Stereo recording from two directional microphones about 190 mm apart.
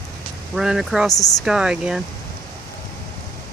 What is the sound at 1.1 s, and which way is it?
Speech, 20° left (ahead or behind).